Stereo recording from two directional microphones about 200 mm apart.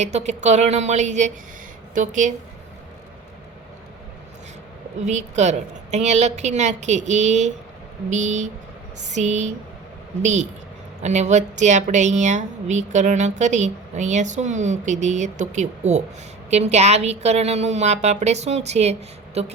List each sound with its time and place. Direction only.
0.0 s a woman's voice: 35° right (ahead or behind)
5.0 s a woman's voice: 35° right (ahead or behind)
11.0 s a woman's voice: 35° right (ahead or behind)